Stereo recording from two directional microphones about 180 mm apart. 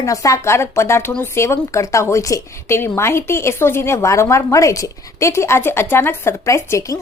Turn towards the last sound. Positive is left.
turn(degrees=15)  # may be behind; listen again after turning